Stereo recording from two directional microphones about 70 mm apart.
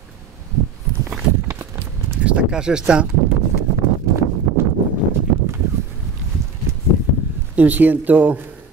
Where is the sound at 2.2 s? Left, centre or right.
Centre.